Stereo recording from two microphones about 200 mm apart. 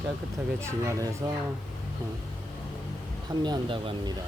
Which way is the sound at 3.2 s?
20° right (ahead or behind).